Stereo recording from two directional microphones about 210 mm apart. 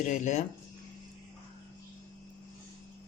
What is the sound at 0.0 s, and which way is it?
Speech, 35° left (ahead or behind).